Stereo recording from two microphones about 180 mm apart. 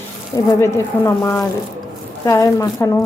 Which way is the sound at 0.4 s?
15° left (ahead or behind).